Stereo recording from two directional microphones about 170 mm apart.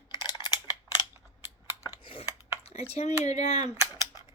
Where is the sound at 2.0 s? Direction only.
30° left (ahead or behind).